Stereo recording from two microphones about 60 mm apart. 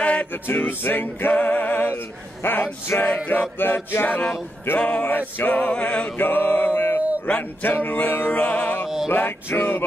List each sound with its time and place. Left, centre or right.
0.0 s music: left
4.6 s choir: left
6.1 s a sound: left
7.2 s choir: left
7.7 s music: left
8.8 s male singing: centre
9.1 s music: left